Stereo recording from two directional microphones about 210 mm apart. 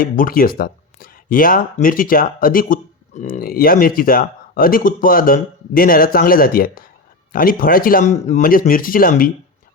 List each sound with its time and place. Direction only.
0.0 s speech: 45° left (ahead or behind)